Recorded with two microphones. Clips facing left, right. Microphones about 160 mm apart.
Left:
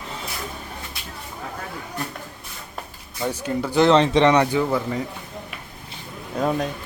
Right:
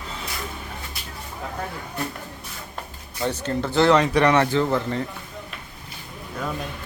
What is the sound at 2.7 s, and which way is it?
A man's voice, 5° left (ahead or behind).